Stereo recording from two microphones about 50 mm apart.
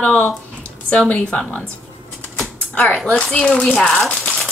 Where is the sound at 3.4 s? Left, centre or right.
Left.